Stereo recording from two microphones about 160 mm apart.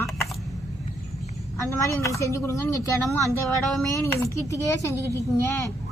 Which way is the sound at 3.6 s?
Centre (ahead or behind).